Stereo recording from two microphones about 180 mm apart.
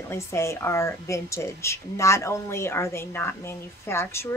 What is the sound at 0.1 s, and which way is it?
A woman's voice, 15° left (ahead or behind).